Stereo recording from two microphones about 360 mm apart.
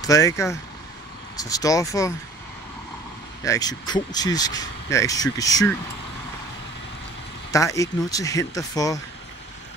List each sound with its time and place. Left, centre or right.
0.0 s speech: centre
3.4 s speech: centre
7.5 s speech: centre